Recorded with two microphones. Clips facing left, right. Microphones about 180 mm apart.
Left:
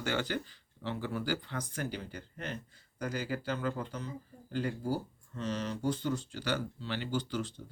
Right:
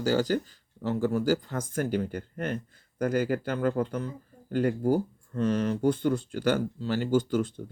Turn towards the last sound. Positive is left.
turn(degrees=-50)  # may be behind; listen again after turning